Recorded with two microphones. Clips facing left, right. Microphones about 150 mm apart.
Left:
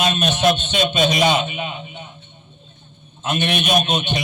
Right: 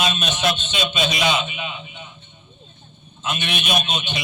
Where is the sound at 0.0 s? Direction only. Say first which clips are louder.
Left 5 dB; 50° left (ahead or behind).